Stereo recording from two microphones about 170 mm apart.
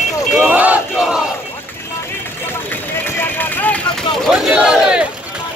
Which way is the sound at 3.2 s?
10° left (ahead or behind).